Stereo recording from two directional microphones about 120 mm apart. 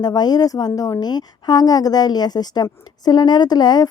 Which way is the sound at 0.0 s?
35° left (ahead or behind).